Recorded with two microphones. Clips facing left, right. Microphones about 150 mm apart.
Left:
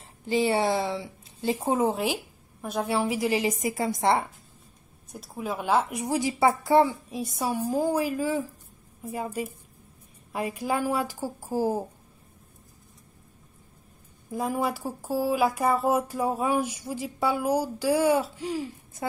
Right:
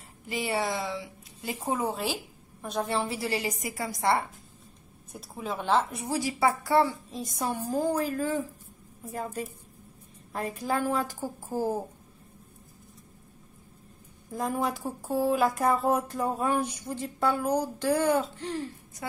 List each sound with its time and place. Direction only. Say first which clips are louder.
0.2 s a woman's voice: left 6 dB; 30° left (ahead or behind)
2.6 s a woman's voice: left 3 dB; 5° left (ahead or behind)
5.1 s speech: left 2 dB; centre (ahead or behind)
14.3 s speech: left 2 dB; 5° left (ahead or behind)